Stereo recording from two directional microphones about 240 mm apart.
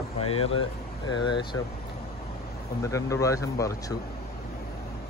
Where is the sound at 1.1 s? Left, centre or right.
Centre.